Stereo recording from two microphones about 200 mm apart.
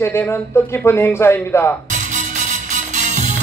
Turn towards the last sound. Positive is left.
turn(degrees=-35)  # may be behind; listen again after turning